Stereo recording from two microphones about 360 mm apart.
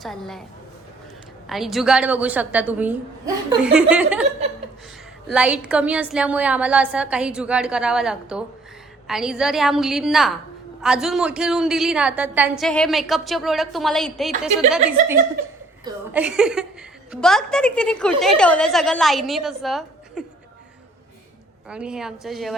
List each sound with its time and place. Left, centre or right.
0.0 s a woman's voice: centre
1.5 s a woman's voice: centre
5.3 s a woman's voice: centre
21.7 s a woman's voice: centre